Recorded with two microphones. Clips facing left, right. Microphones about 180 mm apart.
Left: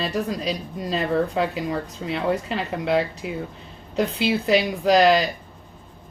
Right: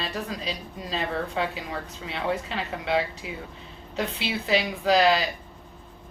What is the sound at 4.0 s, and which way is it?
Speech, 40° left (ahead or behind).